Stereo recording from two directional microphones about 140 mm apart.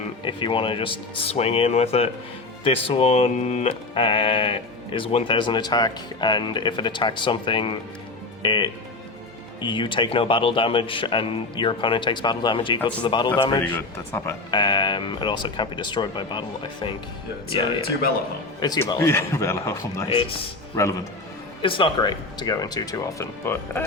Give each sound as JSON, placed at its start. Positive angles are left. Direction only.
{"t": 0.3, "sound": "speech", "side_deg": 35}
{"t": 13.9, "sound": "speech", "side_deg": 20}
{"t": 14.5, "sound": "speech", "side_deg": 30}
{"t": 17.5, "sound": "speech", "side_deg": 35}
{"t": 18.9, "sound": "speech", "side_deg": 20}
{"t": 20.1, "sound": "speech", "side_deg": 40}
{"t": 21.6, "sound": "speech", "side_deg": 40}